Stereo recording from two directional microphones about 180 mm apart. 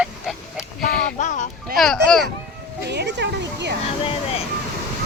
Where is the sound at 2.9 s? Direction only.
70° right (ahead or behind).